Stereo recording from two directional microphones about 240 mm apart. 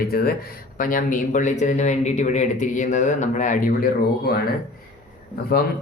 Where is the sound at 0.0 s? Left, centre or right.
Left.